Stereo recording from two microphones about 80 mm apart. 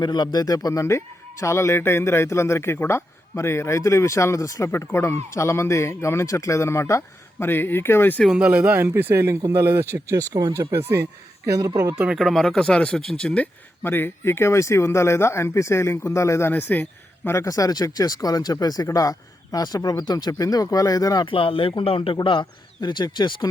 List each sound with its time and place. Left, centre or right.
0.0 s a man's voice: left
4.9 s a man's voice: left
8.3 s speech: centre
8.8 s speech: right
12.1 s speech: centre
13.8 s a man's voice: left
16.5 s speech: left
17.2 s speech: left
21.2 s a man's voice: left